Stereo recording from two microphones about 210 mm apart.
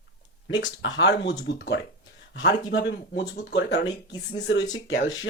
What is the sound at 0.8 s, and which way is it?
Speech, 60° left (ahead or behind).